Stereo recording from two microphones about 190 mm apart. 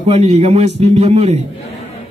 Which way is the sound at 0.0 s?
35° right (ahead or behind).